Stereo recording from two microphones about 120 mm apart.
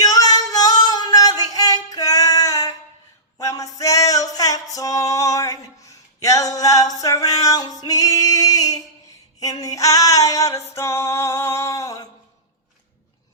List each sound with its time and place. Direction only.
0.0 s female singing: 30° left (ahead or behind)
3.3 s music: 30° left (ahead or behind)
9.4 s female singing: 30° left (ahead or behind)